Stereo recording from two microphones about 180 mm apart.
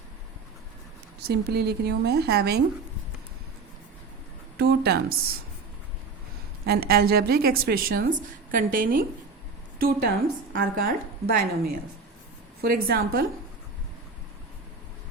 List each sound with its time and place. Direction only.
1.3 s a woman's voice: 65° right (ahead or behind)
4.5 s a woman's voice: 65° right (ahead or behind)
6.7 s a woman's voice: 60° right (ahead or behind)